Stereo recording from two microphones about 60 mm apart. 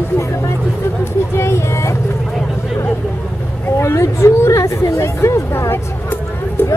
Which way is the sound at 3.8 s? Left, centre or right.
Left.